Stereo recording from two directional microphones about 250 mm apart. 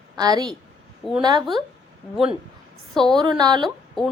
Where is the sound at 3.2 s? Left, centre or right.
Centre.